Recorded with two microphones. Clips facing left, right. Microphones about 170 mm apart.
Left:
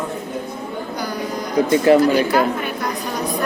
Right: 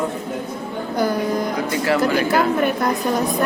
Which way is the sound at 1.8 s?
20° left (ahead or behind).